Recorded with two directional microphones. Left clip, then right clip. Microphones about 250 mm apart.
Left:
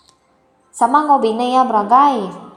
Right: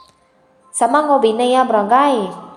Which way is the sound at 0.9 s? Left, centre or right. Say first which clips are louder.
Even; centre.